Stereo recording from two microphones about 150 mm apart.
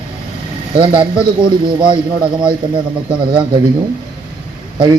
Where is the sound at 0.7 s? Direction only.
35° right (ahead or behind).